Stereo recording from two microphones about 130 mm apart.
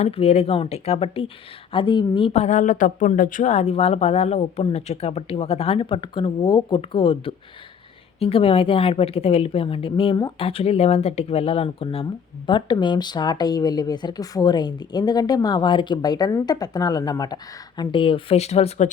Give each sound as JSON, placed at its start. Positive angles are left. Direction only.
{"t": 0.0, "sound": "speech", "side_deg": 50}